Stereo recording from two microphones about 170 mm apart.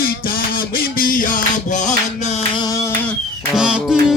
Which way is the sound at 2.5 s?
20° left (ahead or behind).